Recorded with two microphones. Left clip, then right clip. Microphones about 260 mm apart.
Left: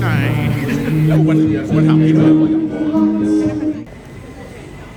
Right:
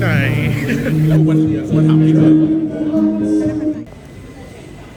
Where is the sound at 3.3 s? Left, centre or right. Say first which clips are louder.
Even; centre.